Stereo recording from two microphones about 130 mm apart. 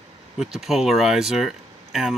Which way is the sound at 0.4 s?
5° right (ahead or behind).